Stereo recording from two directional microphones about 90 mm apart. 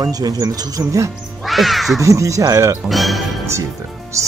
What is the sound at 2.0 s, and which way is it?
Speech, 35° right (ahead or behind).